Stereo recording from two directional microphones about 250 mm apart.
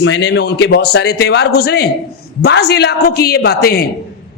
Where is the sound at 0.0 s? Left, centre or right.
Left.